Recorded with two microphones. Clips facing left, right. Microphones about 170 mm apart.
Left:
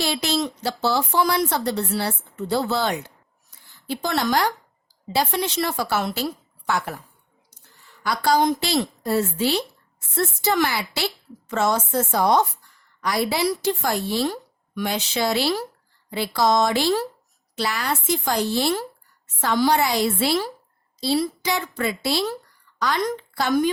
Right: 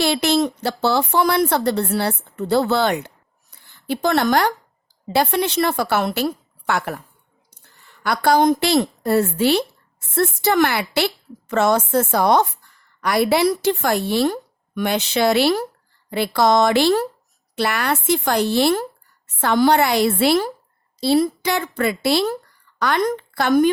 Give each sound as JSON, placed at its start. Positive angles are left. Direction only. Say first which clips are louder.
{"t": 0.0, "sound": "a woman's voice", "louder": "right 6 dB", "side_deg": -65}
{"t": 3.5, "sound": "a sound", "louder": "right 5 dB", "side_deg": -60}
{"t": 5.0, "sound": "a woman's voice", "louder": "right 4 dB", "side_deg": -60}
{"t": 8.0, "sound": "a woman's voice", "louder": "right 4 dB", "side_deg": -60}